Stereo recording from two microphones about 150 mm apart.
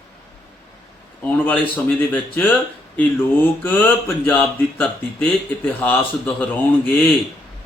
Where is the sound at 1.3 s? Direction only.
10° left (ahead or behind).